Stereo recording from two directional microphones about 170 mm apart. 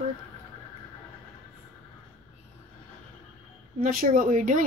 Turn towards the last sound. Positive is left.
turn(degrees=-50)  # may be behind; listen again after turning